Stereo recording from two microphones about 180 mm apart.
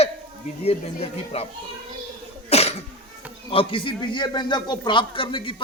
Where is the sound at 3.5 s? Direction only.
30° left (ahead or behind).